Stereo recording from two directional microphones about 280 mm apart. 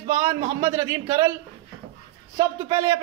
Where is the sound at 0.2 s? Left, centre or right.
Centre.